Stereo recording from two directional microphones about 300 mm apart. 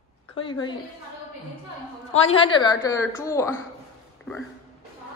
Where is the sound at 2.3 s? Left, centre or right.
Centre.